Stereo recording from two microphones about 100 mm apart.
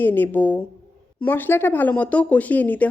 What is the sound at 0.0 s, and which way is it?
Speech, 20° left (ahead or behind).